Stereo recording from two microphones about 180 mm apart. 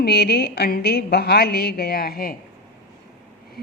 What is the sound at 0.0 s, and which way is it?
A woman's voice, 65° left (ahead or behind).